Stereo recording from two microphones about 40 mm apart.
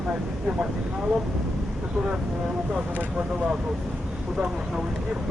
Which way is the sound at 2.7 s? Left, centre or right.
Right.